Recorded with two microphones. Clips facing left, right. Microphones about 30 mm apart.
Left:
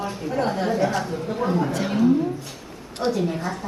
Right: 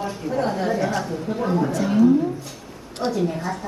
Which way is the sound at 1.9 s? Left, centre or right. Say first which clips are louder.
Right 4 dB; left.